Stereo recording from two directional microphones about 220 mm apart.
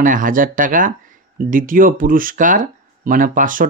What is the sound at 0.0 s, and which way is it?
Speech, 35° right (ahead or behind).